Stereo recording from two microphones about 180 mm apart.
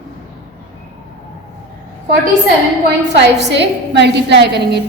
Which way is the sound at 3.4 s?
75° right (ahead or behind).